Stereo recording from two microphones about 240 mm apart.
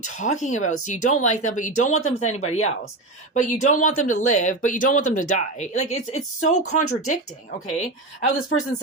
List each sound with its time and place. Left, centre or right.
0.0 s speech: left